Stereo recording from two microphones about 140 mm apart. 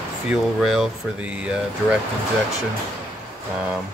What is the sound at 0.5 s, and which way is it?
Speech, centre (ahead or behind).